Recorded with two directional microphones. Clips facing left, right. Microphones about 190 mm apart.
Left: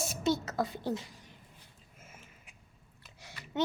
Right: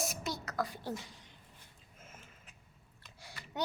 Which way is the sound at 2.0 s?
10° left (ahead or behind).